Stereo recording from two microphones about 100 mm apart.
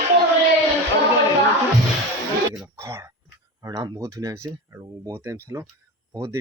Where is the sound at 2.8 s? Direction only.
30° right (ahead or behind).